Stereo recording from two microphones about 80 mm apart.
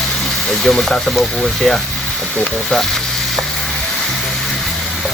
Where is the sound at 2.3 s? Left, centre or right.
Centre.